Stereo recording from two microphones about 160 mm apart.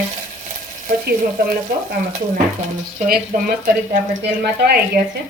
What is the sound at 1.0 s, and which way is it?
Speech, 75° right (ahead or behind).